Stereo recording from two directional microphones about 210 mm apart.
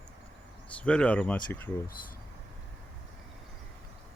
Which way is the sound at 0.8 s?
5° left (ahead or behind).